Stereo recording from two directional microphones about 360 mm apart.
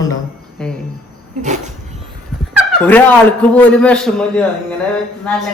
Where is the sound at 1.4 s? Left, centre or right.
Centre.